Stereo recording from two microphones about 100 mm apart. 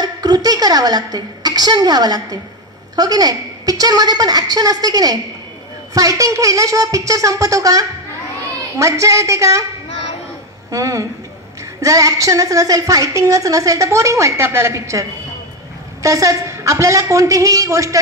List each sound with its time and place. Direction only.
0.0 s a woman's voice: 40° right (ahead or behind)
10.7 s a woman's voice: 35° right (ahead or behind)